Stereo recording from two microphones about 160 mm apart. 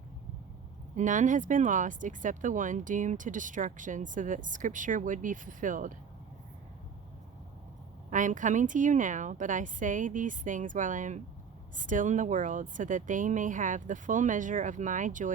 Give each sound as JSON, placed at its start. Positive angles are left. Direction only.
{"t": 0.9, "sound": "speech", "side_deg": -50}
{"t": 8.1, "sound": "speech", "side_deg": -50}